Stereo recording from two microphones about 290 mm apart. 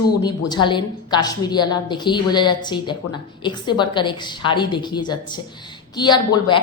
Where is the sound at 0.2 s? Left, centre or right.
Centre.